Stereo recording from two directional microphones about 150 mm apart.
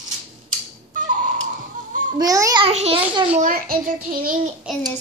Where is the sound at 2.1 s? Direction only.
25° right (ahead or behind).